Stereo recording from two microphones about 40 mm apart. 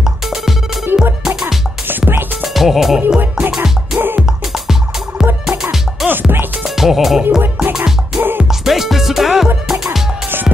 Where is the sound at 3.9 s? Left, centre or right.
Right.